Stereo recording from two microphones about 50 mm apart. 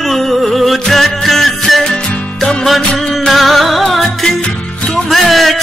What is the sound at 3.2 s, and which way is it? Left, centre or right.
Music, centre.